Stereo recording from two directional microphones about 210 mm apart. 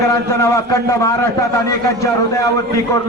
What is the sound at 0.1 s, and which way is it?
A man's voice, 15° left (ahead or behind).